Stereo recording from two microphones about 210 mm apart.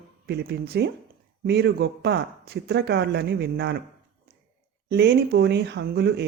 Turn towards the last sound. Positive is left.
turn(degrees=-50)  # may be behind; listen again after turning